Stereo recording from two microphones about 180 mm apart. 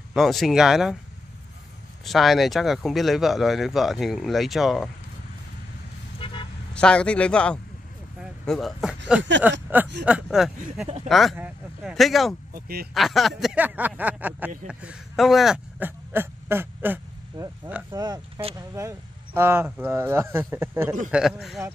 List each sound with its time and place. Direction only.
0.1 s speech: centre (ahead or behind)
2.0 s speech: centre (ahead or behind)
6.1 s vehicle: 30° left (ahead or behind)
6.7 s speech: 5° left (ahead or behind)
12.5 s speech: 55° right (ahead or behind)
12.9 s speech: centre (ahead or behind)
17.9 s speech: 20° right (ahead or behind)
21.1 s speech: 5° right (ahead or behind)